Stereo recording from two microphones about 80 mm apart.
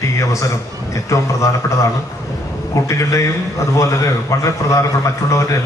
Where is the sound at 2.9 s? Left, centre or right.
Left.